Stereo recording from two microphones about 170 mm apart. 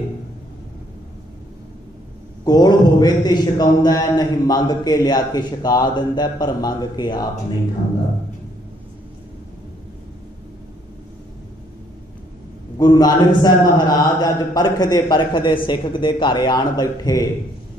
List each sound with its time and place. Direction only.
2.4 s a man's voice: 25° left (ahead or behind)
12.7 s a man's voice: 20° left (ahead or behind)